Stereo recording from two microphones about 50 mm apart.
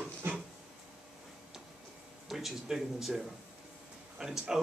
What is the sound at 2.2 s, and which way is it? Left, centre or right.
Speech, centre.